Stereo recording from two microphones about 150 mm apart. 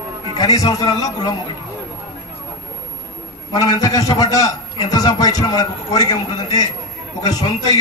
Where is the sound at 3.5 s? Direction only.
25° left (ahead or behind).